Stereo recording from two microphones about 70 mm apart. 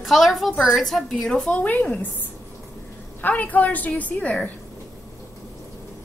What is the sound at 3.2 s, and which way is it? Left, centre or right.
A woman's voice, left.